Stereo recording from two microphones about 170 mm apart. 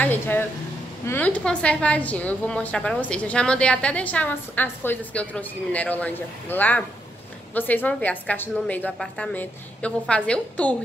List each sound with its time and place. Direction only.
0.0 s a woman's voice: 10° left (ahead or behind)